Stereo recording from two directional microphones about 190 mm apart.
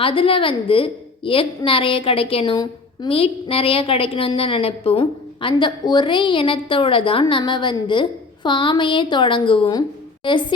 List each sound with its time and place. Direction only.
0.0 s a woman's voice: 30° left (ahead or behind)